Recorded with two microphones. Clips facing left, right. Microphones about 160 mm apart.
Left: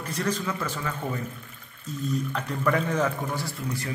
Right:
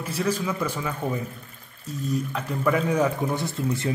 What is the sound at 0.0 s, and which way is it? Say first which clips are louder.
Speech: right 3 dB; 5° right (ahead or behind).